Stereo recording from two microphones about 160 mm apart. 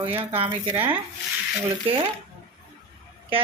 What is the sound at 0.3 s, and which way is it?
Speech, 35° right (ahead or behind).